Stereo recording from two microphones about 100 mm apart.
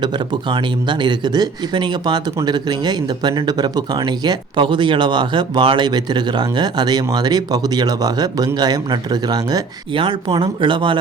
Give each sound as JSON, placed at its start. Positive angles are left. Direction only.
{"t": 0.0, "sound": "a man's voice", "side_deg": -50}
{"t": 9.9, "sound": "speech", "side_deg": -60}